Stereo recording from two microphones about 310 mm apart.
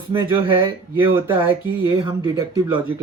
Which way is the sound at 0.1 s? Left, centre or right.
Centre.